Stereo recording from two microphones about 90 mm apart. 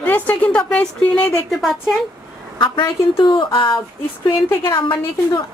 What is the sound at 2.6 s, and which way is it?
A woman's voice, 65° left (ahead or behind).